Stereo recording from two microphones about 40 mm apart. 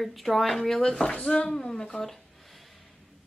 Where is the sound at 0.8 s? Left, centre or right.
Centre.